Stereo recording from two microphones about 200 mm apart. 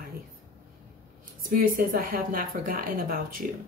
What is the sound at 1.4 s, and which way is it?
Speech, 45° right (ahead or behind).